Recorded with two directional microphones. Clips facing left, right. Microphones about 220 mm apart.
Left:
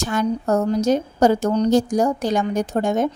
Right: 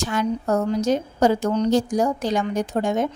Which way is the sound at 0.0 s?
45° left (ahead or behind).